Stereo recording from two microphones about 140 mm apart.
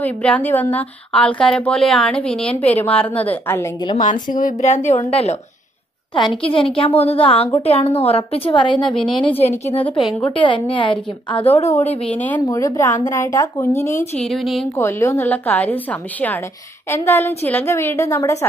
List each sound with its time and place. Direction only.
0.0 s a woman's voice: 10° left (ahead or behind)
3.9 s a woman's voice: 65° left (ahead or behind)
6.1 s a woman's voice: 35° left (ahead or behind)
9.4 s a woman's voice: 50° left (ahead or behind)
10.3 s a woman's voice: 35° left (ahead or behind)
11.8 s a woman's voice: 50° left (ahead or behind)
12.1 s a woman's voice: 10° left (ahead or behind)
12.4 s speech: 20° left (ahead or behind)
14.2 s speech: centre (ahead or behind)
14.8 s a woman's voice: 20° left (ahead or behind)